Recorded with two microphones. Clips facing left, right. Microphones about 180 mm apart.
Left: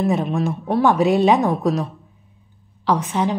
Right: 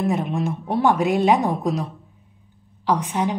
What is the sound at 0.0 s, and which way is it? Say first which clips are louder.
A woman's voice: left 3 dB; 15° right (ahead or behind).